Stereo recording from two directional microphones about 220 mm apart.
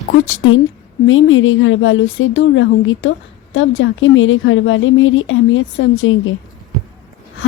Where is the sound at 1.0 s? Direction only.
65° left (ahead or behind).